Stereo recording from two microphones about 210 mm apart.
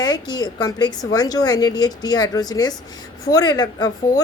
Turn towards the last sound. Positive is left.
turn(degrees=20)  # may be behind; listen again after turning